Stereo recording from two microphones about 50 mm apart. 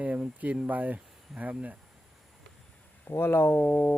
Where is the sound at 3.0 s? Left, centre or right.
Left.